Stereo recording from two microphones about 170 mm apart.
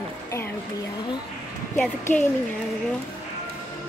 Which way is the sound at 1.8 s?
10° left (ahead or behind).